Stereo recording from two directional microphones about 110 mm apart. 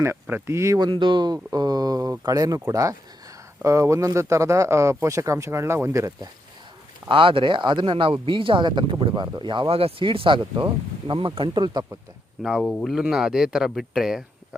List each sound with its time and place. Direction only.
0.0 s speech: 20° right (ahead or behind)
0.8 s speech: 45° right (ahead or behind); by 6.1 s 30° right (ahead or behind)
7.1 s speech: 50° right (ahead or behind)
12.4 s speech: 5° right (ahead or behind)